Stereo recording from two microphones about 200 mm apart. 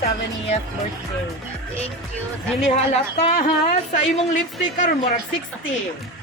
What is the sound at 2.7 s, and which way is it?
A woman's voice, 30° left (ahead or behind).